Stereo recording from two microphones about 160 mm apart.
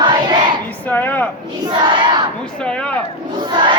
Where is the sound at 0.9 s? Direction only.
10° left (ahead or behind).